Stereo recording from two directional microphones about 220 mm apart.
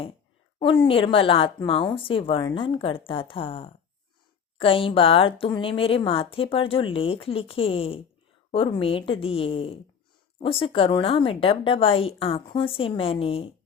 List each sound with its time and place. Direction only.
0.6 s speech: 25° left (ahead or behind)